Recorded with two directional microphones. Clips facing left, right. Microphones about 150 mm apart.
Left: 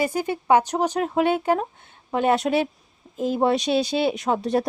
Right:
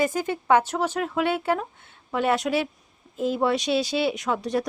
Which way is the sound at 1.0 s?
35° left (ahead or behind).